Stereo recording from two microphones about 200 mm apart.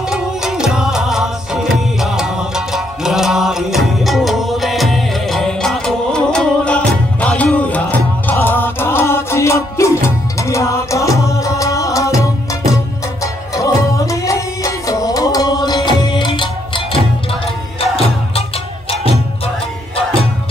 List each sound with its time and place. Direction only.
0.1 s music: 5° right (ahead or behind); by 19.5 s 30° left (ahead or behind)